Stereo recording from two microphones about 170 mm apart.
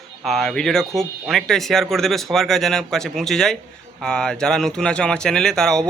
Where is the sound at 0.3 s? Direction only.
Centre (ahead or behind).